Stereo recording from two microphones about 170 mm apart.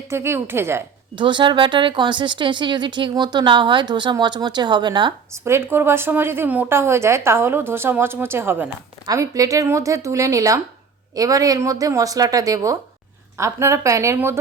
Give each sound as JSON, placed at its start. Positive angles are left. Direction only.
{"t": 0.1, "sound": "speech", "side_deg": -15}
{"t": 1.1, "sound": "speech", "side_deg": -30}
{"t": 5.3, "sound": "speech", "side_deg": -15}